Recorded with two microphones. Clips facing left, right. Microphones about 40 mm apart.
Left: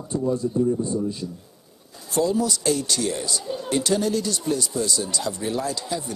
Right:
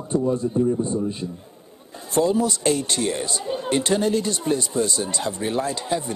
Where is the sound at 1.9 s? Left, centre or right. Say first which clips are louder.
Right 2 dB; right.